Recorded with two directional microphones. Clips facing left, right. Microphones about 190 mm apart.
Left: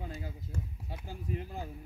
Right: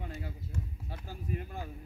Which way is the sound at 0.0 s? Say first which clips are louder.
Even; 10° left (ahead or behind).